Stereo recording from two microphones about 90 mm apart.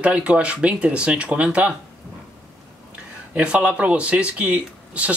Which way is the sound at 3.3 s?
15° right (ahead or behind).